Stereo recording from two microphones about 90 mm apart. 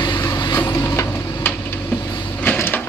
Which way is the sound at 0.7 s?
30° left (ahead or behind).